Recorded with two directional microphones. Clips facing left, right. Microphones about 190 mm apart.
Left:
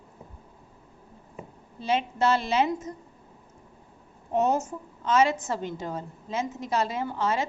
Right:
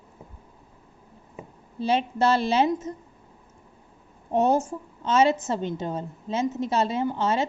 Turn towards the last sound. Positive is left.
turn(degrees=-25)  # may be behind; listen again after turning